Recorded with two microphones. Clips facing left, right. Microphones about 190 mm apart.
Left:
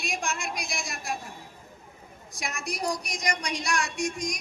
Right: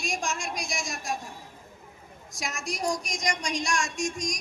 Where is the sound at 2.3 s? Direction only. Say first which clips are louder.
Even; 45° right (ahead or behind).